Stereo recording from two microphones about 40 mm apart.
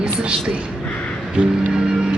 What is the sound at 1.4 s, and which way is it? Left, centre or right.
Speech, right.